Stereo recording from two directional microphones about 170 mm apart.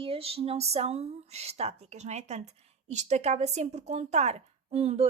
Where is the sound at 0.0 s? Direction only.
35° right (ahead or behind).